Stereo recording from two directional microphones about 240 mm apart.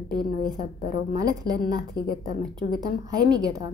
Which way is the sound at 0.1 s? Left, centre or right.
Left.